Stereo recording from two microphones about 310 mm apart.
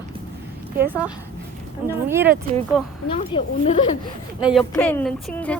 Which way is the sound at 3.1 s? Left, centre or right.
Centre.